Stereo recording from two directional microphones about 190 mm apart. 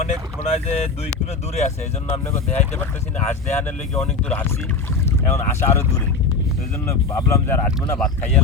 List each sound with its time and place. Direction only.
0.0 s vehicle: 35° left (ahead or behind)
1.5 s speech: 35° left (ahead or behind)
2.2 s speech: 10° left (ahead or behind)
6.8 s speech: 15° left (ahead or behind)